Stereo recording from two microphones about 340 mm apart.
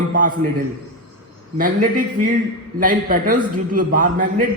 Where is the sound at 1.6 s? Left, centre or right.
Right.